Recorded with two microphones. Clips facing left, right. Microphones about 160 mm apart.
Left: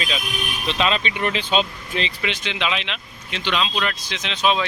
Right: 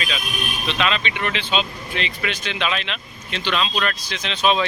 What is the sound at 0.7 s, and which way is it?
Speech, 35° left (ahead or behind).